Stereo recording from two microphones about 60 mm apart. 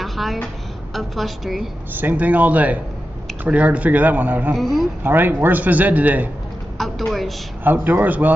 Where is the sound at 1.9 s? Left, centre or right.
Right.